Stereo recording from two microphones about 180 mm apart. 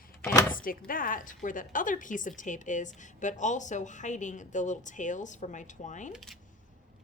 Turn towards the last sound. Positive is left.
turn(degrees=0)  # may be behind; listen again after turning